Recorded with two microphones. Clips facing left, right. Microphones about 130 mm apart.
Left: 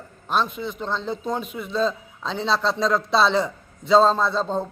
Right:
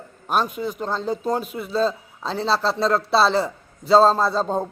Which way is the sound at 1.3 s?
5° right (ahead or behind).